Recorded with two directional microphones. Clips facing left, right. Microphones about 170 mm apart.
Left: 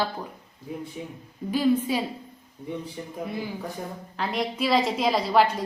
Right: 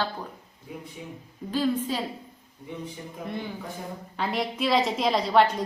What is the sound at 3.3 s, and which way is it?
A woman's voice, 5° left (ahead or behind).